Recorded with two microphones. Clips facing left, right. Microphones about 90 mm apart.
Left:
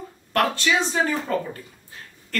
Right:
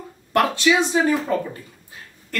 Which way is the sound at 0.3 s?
15° right (ahead or behind).